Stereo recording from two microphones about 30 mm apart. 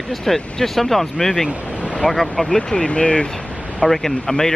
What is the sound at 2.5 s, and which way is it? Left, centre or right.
Speech, left.